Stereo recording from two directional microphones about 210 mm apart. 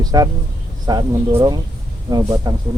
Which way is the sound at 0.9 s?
20° right (ahead or behind).